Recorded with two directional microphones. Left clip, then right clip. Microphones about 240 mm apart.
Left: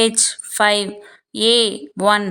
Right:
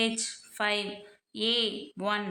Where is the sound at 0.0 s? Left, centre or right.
Left.